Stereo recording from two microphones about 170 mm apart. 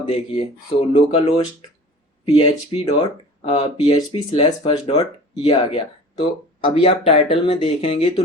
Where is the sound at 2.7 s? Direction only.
30° left (ahead or behind).